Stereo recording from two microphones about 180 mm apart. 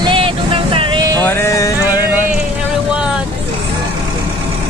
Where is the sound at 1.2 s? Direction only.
15° left (ahead or behind).